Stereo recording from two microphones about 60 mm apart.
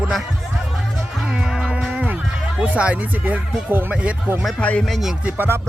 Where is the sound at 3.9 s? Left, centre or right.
Right.